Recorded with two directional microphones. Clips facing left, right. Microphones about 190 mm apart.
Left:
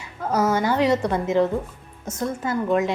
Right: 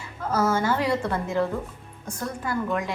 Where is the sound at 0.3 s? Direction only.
15° left (ahead or behind).